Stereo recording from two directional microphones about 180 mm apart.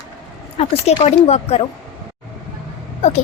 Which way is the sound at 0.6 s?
35° left (ahead or behind).